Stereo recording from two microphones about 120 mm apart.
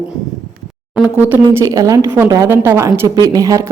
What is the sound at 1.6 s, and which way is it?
A woman's voice, 30° right (ahead or behind).